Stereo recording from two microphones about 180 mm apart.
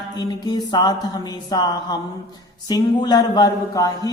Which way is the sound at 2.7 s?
25° left (ahead or behind).